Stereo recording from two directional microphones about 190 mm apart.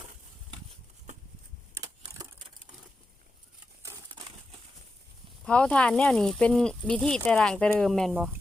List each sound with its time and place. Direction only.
1.7 s wood: 20° right (ahead or behind)
3.8 s crumpling: 20° right (ahead or behind)
5.5 s speech: 5° left (ahead or behind)